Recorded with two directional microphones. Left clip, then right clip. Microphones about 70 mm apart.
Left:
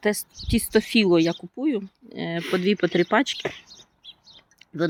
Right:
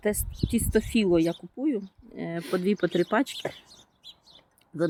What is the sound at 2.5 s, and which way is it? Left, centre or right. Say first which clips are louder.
Speech: left 4 dB; centre.